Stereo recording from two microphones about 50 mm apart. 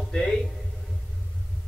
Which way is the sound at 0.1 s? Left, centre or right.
Centre.